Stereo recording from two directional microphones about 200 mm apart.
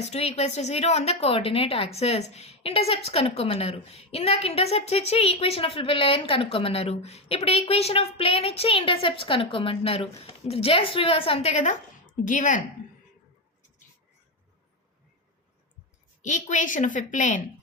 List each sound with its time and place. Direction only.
0.0 s a woman's voice: 30° left (ahead or behind)
16.2 s a woman's voice: 40° left (ahead or behind)